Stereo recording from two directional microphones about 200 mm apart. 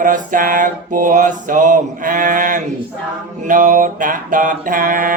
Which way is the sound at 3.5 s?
40° right (ahead or behind).